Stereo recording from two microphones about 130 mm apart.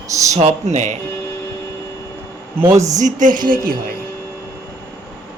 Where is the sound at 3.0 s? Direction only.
80° right.